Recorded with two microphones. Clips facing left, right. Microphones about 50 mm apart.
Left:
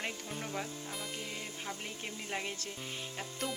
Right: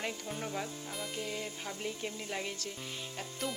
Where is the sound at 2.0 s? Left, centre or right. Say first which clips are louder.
Left 3 dB; centre.